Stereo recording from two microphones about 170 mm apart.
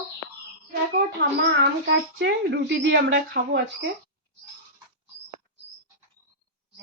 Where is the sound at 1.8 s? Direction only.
90° right.